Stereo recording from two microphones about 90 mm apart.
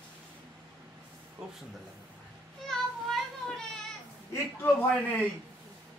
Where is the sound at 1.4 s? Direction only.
10° right (ahead or behind).